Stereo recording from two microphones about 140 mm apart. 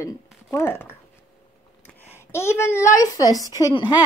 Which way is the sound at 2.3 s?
20° left (ahead or behind).